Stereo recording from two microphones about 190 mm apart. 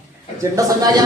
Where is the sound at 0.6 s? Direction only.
15° right (ahead or behind).